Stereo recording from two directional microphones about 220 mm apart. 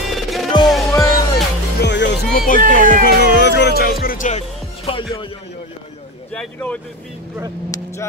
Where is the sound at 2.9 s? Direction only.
45° left (ahead or behind).